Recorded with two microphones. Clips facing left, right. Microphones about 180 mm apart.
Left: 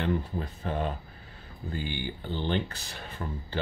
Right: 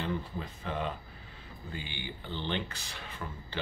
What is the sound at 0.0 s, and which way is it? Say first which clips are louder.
Speech: left 5 dB; 45° left (ahead or behind).